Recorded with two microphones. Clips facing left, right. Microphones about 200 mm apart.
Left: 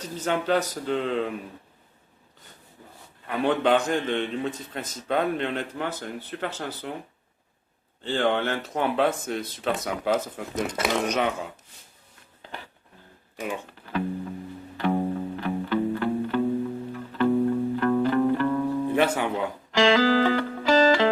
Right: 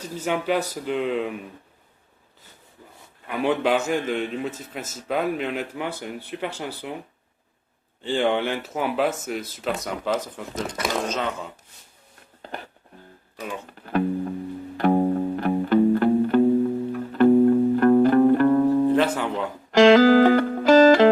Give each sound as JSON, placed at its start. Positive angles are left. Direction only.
{"t": 0.2, "sound": "a man's voice", "side_deg": -10}
{"t": 3.2, "sound": "a man's voice", "side_deg": -10}
{"t": 8.0, "sound": "speech", "side_deg": -10}
{"t": 10.5, "sound": "speech", "side_deg": 15}
{"t": 12.4, "sound": "a sound", "side_deg": -45}
{"t": 13.3, "sound": "speech", "side_deg": 15}
{"t": 13.8, "sound": "music", "side_deg": -50}
{"t": 18.9, "sound": "speech", "side_deg": 10}
{"t": 19.7, "sound": "music", "side_deg": -45}